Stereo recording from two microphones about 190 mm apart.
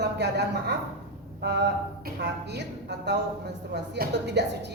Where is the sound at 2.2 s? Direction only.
60° right (ahead or behind).